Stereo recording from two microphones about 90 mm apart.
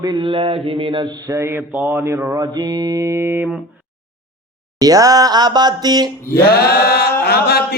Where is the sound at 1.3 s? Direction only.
30° right (ahead or behind).